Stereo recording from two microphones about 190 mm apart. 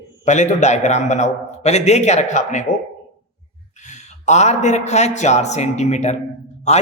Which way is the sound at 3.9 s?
35° left (ahead or behind).